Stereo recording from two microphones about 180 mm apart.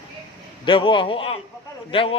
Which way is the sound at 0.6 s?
30° left (ahead or behind).